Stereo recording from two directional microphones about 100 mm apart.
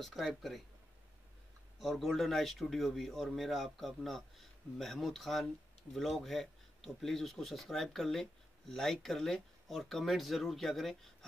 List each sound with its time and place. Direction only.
0.0 s speech: centre (ahead or behind)
1.8 s speech: centre (ahead or behind)